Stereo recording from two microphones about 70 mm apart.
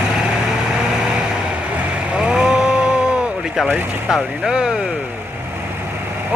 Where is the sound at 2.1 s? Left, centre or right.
Centre.